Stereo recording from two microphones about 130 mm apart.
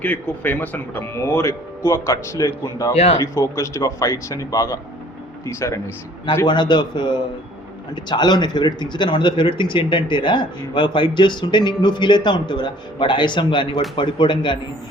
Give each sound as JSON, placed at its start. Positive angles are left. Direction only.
{"t": 0.0, "sound": "speech", "side_deg": 15}
{"t": 2.9, "sound": "speech", "side_deg": 55}
{"t": 3.2, "sound": "speech", "side_deg": 25}
{"t": 6.4, "sound": "speech", "side_deg": 35}